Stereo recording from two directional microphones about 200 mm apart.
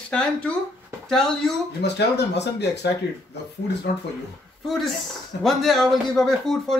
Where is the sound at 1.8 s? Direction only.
55° left (ahead or behind).